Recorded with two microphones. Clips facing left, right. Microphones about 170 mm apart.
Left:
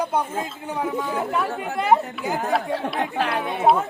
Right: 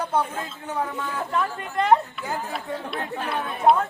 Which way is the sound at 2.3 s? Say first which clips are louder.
Left 7 dB; 80° left.